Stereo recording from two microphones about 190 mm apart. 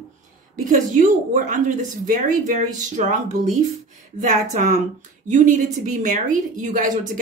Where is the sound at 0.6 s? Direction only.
40° right (ahead or behind).